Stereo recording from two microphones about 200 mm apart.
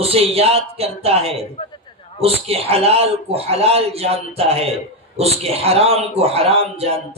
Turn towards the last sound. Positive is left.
turn(degrees=-30)  # may be behind; listen again after turning